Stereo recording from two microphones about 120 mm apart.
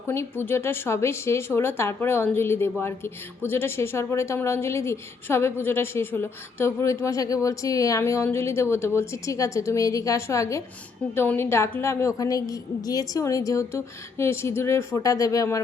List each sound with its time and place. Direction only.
0.1 s speech: 20° left (ahead or behind)